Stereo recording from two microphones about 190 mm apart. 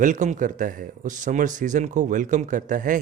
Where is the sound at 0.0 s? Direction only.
40° right (ahead or behind).